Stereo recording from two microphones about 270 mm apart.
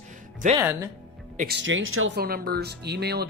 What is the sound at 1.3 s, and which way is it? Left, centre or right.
Speech, right.